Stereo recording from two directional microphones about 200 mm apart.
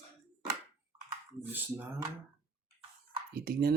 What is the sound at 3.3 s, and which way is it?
Speech, 50° right (ahead or behind).